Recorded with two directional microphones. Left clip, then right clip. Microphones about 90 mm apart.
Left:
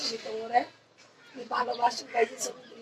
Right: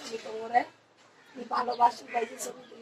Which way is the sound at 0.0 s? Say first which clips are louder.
Left 3 dB; 30° left (ahead or behind).